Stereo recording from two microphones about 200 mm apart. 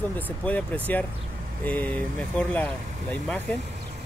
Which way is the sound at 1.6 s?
10° left (ahead or behind).